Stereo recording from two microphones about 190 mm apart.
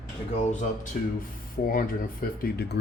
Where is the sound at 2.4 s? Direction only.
55° left (ahead or behind).